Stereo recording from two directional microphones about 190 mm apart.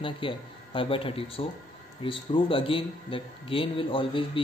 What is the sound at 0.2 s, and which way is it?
Speech, 25° left (ahead or behind).